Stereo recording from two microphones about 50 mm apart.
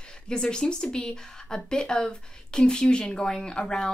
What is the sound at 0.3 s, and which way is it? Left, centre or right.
Speech, centre.